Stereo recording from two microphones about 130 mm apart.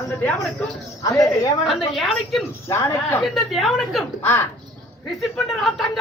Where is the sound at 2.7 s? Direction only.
20° left (ahead or behind).